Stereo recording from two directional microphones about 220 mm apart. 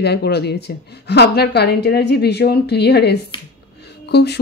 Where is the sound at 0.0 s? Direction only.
50° left (ahead or behind).